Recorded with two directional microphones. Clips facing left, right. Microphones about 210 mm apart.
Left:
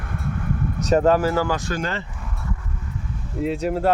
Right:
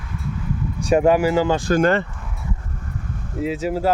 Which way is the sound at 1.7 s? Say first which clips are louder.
Right 10 dB; 55° right (ahead or behind).